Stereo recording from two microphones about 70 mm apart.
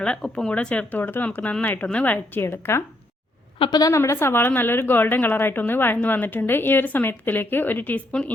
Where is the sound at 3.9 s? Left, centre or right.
Left.